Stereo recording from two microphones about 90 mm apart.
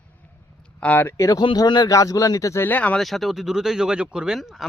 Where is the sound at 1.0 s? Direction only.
35° left (ahead or behind).